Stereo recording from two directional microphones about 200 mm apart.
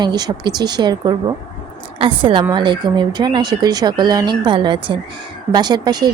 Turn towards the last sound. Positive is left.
turn(degrees=-20)  # may be behind; listen again after turning